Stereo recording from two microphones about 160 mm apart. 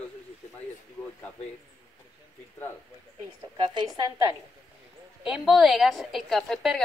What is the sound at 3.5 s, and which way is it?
Speech, 30° right (ahead or behind).